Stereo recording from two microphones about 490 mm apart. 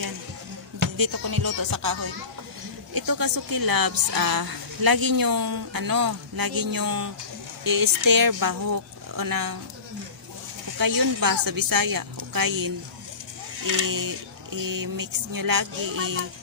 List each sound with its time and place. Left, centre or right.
0.9 s a woman's voice: right
10.8 s a woman's voice: right